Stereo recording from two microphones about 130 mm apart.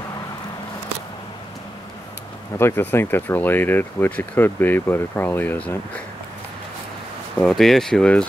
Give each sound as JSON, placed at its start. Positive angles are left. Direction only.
{"t": 2.6, "sound": "speech", "side_deg": 15}
{"t": 7.3, "sound": "speech", "side_deg": 5}